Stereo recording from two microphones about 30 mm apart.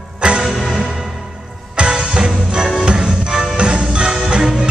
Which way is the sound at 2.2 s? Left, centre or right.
Right.